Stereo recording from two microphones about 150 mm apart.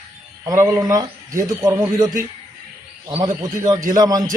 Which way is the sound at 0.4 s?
20° right (ahead or behind).